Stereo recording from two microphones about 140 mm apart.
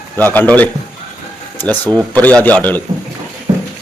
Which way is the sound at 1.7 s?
10° left (ahead or behind).